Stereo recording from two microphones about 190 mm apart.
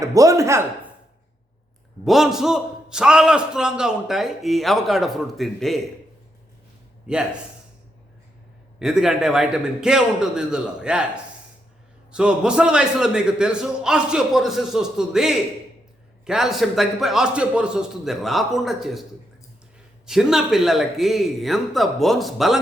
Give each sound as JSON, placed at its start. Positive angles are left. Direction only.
{"t": 0.0, "sound": "speech", "side_deg": -20}
{"t": 2.0, "sound": "a man's voice", "side_deg": 0}
{"t": 7.1, "sound": "a man's voice", "side_deg": -5}
{"t": 8.8, "sound": "a man's voice", "side_deg": 0}
{"t": 20.1, "sound": "a man's voice", "side_deg": 0}